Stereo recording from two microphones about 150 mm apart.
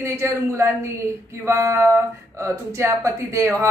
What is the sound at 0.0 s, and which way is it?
Speech, 15° right (ahead or behind).